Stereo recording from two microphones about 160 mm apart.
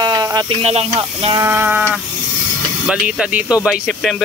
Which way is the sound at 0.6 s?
40° right (ahead or behind).